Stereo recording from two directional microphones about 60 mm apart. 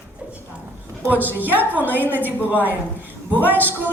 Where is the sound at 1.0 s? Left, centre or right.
Right.